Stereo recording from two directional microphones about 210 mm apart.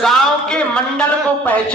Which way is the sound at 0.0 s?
5° left (ahead or behind).